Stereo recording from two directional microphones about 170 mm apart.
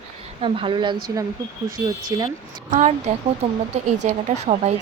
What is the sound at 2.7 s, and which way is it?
Speech, 40° right (ahead or behind).